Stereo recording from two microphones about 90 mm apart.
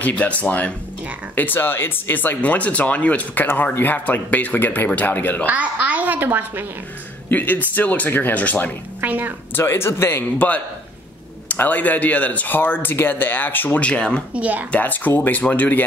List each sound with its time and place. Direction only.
0.0 s speech: 15° left (ahead or behind)
5.5 s a child's voice: 15° right (ahead or behind)
7.2 s speech: 20° left (ahead or behind)
9.0 s a child's voice: 20° right (ahead or behind)
9.6 s speech: 25° left (ahead or behind)
11.4 s speech: 20° left (ahead or behind)
14.3 s a woman's voice: 15° right (ahead or behind)
14.7 s speech: 20° left (ahead or behind)